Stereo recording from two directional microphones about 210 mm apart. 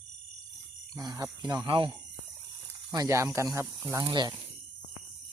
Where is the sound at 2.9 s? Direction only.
15° right (ahead or behind).